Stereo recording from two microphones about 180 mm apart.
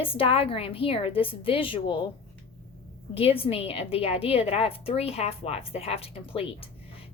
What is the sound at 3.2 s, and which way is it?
A woman's voice, 30° left (ahead or behind).